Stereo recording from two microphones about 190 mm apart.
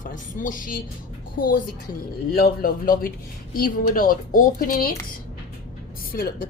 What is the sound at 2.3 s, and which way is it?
A woman's voice, 50° left (ahead or behind).